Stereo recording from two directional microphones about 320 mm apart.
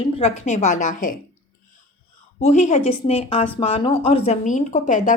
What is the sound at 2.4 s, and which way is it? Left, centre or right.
Speech, left.